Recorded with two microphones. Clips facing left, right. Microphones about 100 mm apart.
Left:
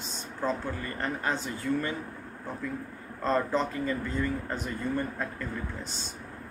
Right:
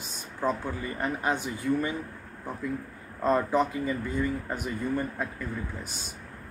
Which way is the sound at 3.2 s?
10° right (ahead or behind).